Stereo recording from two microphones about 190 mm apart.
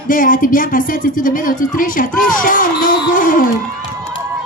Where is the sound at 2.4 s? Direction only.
45° left (ahead or behind).